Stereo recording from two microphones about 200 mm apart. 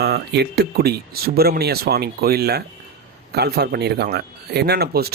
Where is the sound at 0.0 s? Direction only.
55° right (ahead or behind).